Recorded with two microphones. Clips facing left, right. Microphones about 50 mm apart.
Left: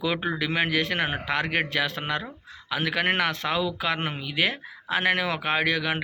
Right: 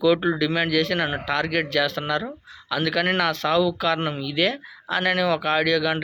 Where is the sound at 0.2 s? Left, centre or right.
Centre.